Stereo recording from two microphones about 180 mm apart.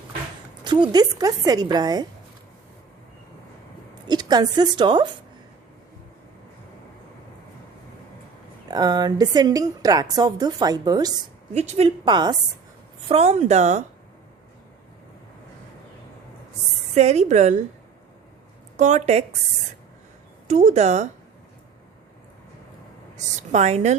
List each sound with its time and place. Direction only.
0.6 s a woman's voice: 25° right (ahead or behind)
4.0 s a woman's voice: 20° right (ahead or behind)
8.7 s a woman's voice: 20° right (ahead or behind)
11.5 s speech: 40° right (ahead or behind)
12.0 s a woman's voice: 25° right (ahead or behind)
13.1 s speech: 35° right (ahead or behind)
16.9 s speech: 40° right (ahead or behind)
18.8 s speech: 40° right (ahead or behind)
20.5 s speech: 40° right (ahead or behind)
23.1 s a woman's voice: 40° right (ahead or behind)